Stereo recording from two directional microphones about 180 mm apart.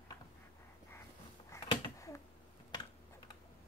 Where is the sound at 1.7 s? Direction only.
20° left (ahead or behind).